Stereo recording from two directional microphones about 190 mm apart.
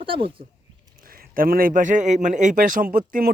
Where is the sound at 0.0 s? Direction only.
25° right (ahead or behind).